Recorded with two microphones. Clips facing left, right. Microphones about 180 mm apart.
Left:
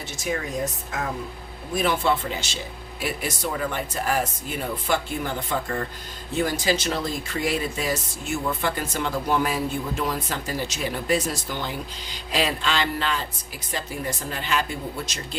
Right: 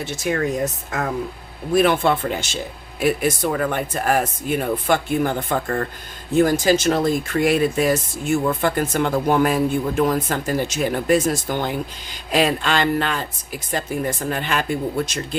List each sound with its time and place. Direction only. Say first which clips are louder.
0.0 s speech: right 6 dB; 60° right (ahead or behind)
1.7 s speech: right 6 dB; 60° right (ahead or behind)